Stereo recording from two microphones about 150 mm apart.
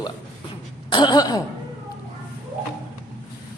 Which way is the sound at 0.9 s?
30° left (ahead or behind).